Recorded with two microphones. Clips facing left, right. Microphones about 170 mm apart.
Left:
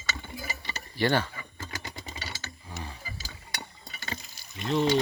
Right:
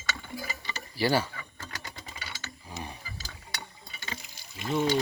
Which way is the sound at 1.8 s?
35° left (ahead or behind).